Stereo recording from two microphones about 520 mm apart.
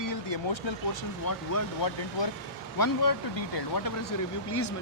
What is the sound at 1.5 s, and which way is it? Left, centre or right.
Speech, left.